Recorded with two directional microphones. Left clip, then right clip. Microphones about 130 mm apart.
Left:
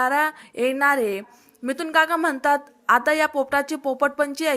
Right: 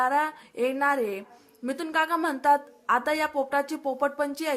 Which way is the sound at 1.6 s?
20° left (ahead or behind).